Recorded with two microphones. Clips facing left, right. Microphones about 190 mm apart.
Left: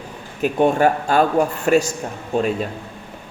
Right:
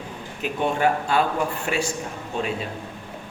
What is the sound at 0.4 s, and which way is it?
Speech, 45° left (ahead or behind).